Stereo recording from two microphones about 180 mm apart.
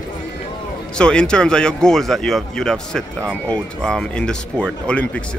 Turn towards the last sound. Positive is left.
turn(degrees=5)  # may be behind; listen again after turning